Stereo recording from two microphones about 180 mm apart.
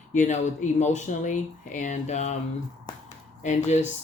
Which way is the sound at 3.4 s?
40° left (ahead or behind).